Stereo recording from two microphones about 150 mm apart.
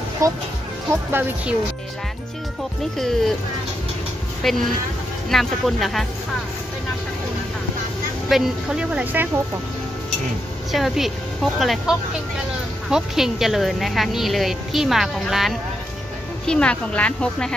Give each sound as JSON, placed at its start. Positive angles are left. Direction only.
{"t": 0.2, "sound": "speech", "side_deg": -20}
{"t": 2.8, "sound": "a woman's voice", "side_deg": 0}
{"t": 4.4, "sound": "a woman's voice", "side_deg": 0}
{"t": 8.3, "sound": "speech", "side_deg": -5}
{"t": 10.7, "sound": "a woman's voice", "side_deg": 0}